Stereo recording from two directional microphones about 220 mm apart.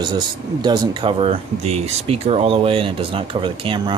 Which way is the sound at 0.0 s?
20° right (ahead or behind).